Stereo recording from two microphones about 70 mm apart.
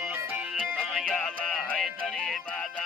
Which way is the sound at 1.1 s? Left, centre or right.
Centre.